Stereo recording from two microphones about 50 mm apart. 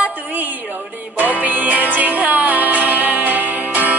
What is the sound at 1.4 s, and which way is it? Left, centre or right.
Music, right.